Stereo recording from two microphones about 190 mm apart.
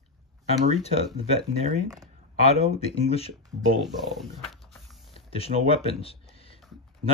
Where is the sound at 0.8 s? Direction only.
35° left (ahead or behind).